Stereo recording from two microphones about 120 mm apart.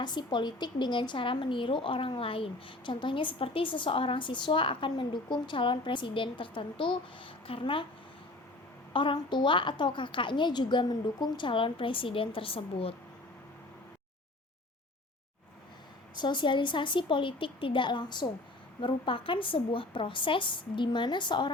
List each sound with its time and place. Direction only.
0.0 s a woman's voice: 40° left (ahead or behind)
8.9 s a woman's voice: 45° left (ahead or behind)
16.1 s a woman's voice: 40° left (ahead or behind)